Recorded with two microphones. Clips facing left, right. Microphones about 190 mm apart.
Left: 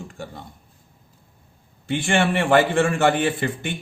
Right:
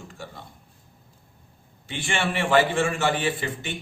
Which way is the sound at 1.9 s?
55° left (ahead or behind).